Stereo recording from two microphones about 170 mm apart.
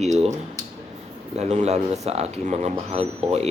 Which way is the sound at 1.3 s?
40° right (ahead or behind).